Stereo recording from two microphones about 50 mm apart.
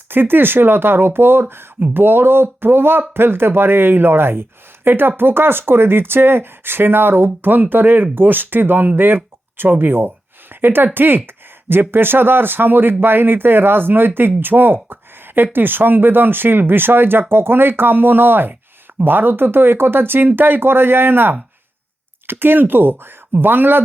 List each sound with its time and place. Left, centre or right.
0.1 s speech: right